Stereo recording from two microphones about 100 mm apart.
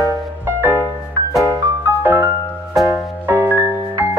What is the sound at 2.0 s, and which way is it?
Music, 20° right (ahead or behind).